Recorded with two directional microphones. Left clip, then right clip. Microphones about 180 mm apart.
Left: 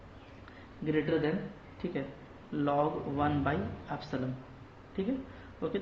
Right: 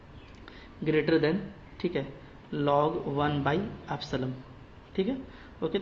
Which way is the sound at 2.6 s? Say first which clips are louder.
Right 4 dB; 45° right (ahead or behind).